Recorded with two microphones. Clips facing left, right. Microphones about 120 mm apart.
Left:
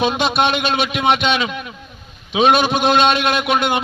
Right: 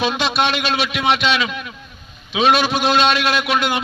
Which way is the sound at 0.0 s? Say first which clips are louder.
Left 2 dB; 50° left (ahead or behind).